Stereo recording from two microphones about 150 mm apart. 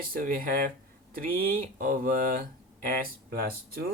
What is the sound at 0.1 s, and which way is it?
Speech, 75° right (ahead or behind).